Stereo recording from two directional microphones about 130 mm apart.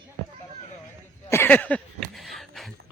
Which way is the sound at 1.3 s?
15° left (ahead or behind).